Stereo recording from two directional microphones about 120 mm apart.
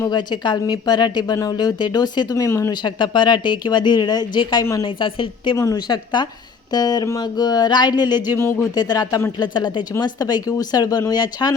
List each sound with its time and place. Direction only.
0.1 s speech: 40° left (ahead or behind)
2.8 s a woman's voice: 40° left (ahead or behind)
5.5 s speech: 30° left (ahead or behind)
8.4 s speech: 20° left (ahead or behind)
8.7 s speech: 35° left (ahead or behind)